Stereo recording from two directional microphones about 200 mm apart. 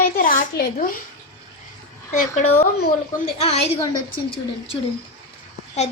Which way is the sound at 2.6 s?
50° left (ahead or behind).